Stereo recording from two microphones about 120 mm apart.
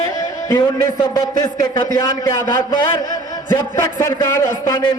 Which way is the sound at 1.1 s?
35° left (ahead or behind).